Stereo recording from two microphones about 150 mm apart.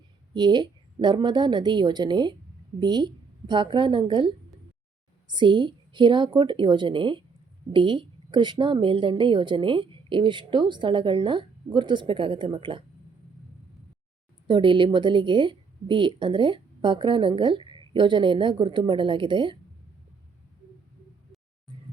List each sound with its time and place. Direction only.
0.3 s a woman's voice: 30° right (ahead or behind)
5.3 s a woman's voice: 30° right (ahead or behind)
14.4 s a woman's voice: 35° right (ahead or behind)